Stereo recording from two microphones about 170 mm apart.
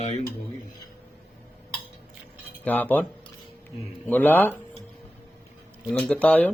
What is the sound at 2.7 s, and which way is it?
Speech, 10° left (ahead or behind).